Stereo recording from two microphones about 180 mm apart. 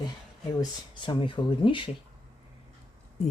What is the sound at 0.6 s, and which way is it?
Speech, 25° left (ahead or behind).